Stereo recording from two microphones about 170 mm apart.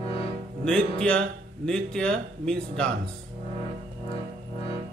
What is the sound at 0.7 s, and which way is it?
A man's voice, 5° left (ahead or behind).